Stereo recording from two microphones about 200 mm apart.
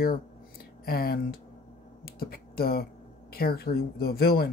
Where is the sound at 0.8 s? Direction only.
50° left (ahead or behind).